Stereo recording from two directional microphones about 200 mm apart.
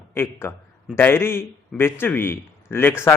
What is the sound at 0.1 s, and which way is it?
A man's voice, 10° left (ahead or behind).